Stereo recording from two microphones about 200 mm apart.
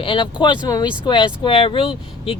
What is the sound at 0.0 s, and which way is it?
Speech, 25° left (ahead or behind).